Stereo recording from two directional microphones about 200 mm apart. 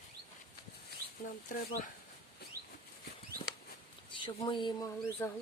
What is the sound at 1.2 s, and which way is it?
Speech, 40° left (ahead or behind).